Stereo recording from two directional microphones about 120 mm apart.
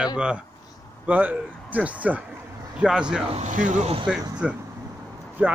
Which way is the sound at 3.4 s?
90° right.